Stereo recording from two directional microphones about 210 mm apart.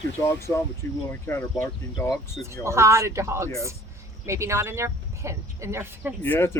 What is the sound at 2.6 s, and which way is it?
Speech, 15° right (ahead or behind).